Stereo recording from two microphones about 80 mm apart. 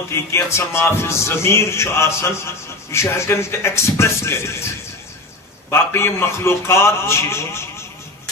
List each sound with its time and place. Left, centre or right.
0.1 s a man's voice: left
5.7 s a man's voice: left